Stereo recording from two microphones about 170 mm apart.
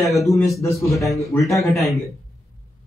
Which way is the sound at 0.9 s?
Centre (ahead or behind).